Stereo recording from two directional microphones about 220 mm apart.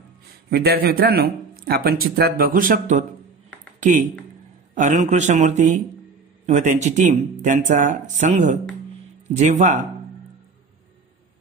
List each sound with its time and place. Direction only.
0.5 s speech: 45° right (ahead or behind)